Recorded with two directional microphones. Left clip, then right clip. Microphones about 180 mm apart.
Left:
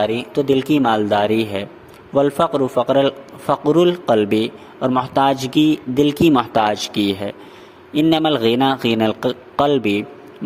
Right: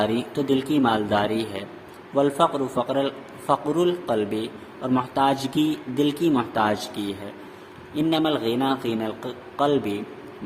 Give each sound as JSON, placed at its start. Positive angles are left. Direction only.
{"t": 0.0, "sound": "a man's voice", "side_deg": 35}